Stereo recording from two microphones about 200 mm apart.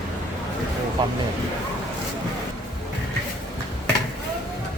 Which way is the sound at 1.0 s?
20° right (ahead or behind).